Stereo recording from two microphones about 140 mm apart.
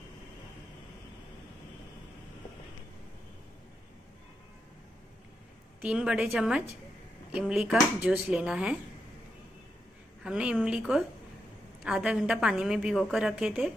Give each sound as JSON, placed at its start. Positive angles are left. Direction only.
{"t": 5.8, "sound": "a woman's voice", "side_deg": -10}
{"t": 10.2, "sound": "a woman's voice", "side_deg": -5}